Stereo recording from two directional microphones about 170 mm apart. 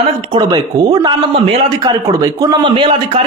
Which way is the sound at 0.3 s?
25° right (ahead or behind).